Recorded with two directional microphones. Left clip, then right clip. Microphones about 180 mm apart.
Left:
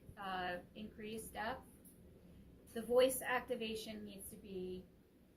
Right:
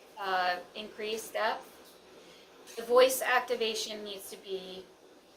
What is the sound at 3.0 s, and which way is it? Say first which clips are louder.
Speech: right 10 dB; 20° right (ahead or behind).